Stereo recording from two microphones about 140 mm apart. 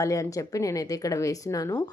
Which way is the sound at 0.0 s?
25° left (ahead or behind).